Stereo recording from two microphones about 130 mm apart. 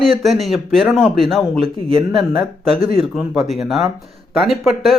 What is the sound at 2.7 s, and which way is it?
Speech, 45° right (ahead or behind).